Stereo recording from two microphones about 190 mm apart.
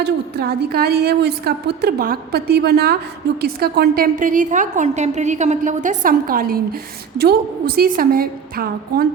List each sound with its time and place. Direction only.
0.0 s a woman's voice: 55° right (ahead or behind)